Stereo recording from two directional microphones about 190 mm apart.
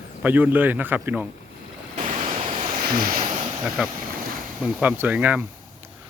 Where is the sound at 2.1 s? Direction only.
35° right (ahead or behind).